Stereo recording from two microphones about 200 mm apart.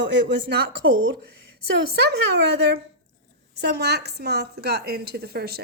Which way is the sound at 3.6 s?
55° right (ahead or behind).